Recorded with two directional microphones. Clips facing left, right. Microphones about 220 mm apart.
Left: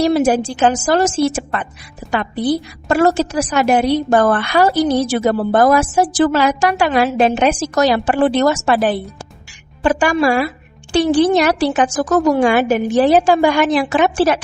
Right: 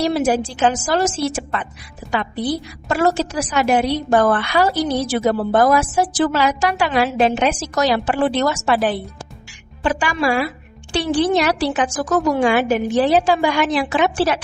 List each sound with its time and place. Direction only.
0.0 s a woman's voice: 45° left (ahead or behind)
2.9 s a woman's voice: 45° left (ahead or behind)